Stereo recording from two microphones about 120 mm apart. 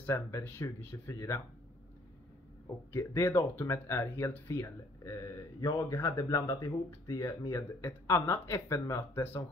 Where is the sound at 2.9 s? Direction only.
25° left (ahead or behind).